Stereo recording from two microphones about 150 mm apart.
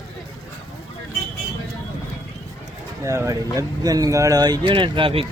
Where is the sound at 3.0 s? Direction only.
20° right (ahead or behind); by 5.2 s 35° right (ahead or behind).